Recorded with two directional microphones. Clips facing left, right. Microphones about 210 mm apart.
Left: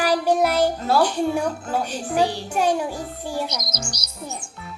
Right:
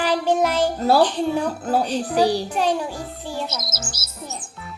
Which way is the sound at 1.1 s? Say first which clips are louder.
Even; 10° left (ahead or behind).